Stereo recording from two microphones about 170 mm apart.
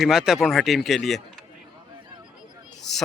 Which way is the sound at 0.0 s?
5° right (ahead or behind).